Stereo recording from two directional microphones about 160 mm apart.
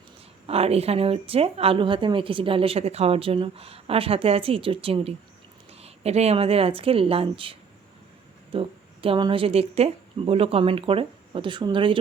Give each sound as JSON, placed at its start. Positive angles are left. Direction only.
{"t": 0.4, "sound": "speech", "side_deg": -40}
{"t": 8.5, "sound": "speech", "side_deg": -35}